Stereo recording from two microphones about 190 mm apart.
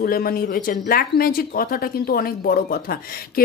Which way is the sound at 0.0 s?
50° left (ahead or behind).